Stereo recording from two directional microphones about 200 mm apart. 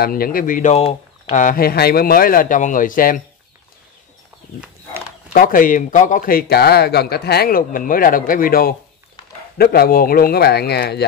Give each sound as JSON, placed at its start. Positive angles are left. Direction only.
{"t": 0.0, "sound": "speech", "side_deg": 45}
{"t": 5.3, "sound": "speech", "side_deg": 45}